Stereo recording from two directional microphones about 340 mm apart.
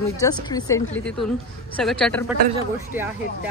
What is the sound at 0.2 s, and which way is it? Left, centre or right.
A woman's voice, centre.